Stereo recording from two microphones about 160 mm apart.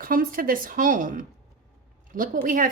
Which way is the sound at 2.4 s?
55° right (ahead or behind).